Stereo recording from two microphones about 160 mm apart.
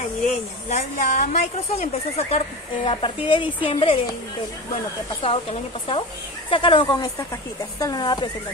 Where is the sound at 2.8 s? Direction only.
30° left (ahead or behind).